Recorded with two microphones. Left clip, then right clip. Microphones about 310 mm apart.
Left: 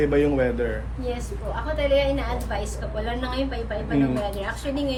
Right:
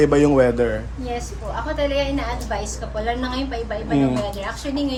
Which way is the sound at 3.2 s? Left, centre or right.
Centre.